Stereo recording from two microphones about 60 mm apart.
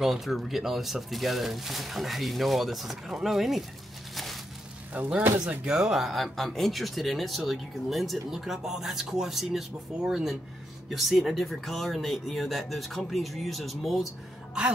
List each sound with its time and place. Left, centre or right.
0.0 s speech: centre
4.1 s a sound: centre
4.9 s speech: right
5.7 s speech: centre
14.6 s speech: centre